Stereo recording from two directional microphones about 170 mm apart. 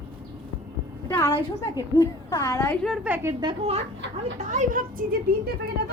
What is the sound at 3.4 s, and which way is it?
Speech, 35° right (ahead or behind).